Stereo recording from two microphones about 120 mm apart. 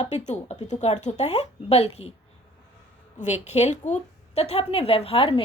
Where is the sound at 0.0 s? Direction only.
65° left (ahead or behind).